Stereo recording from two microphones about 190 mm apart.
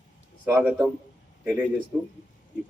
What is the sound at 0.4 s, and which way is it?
Speech, 5° right (ahead or behind).